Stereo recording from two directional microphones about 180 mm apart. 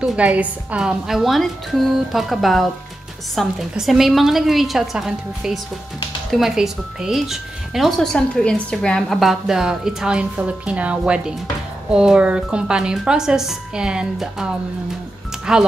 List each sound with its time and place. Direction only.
0.0 s speech: 5° right (ahead or behind)